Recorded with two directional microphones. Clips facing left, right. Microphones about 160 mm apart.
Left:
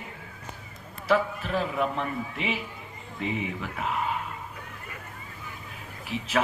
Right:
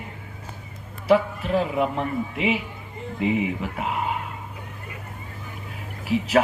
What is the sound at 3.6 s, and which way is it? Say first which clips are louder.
Speech: right 3 dB; 25° right (ahead or behind).